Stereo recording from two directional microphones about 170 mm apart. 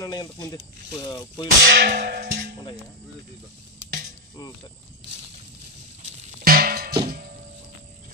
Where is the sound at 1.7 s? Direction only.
75° right (ahead or behind).